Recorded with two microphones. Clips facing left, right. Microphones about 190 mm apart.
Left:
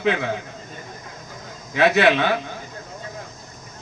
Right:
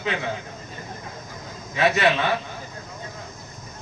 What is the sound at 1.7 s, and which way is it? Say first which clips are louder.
Speech: left 4 dB; 70° left (ahead or behind).